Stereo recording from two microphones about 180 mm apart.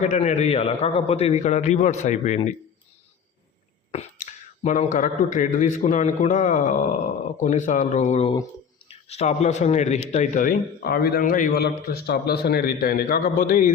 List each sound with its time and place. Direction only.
0.0 s speech: 40° left (ahead or behind)
3.9 s speech: 40° left (ahead or behind)
10.2 s speech: 50° left (ahead or behind)
11.6 s a man's voice: 60° left (ahead or behind)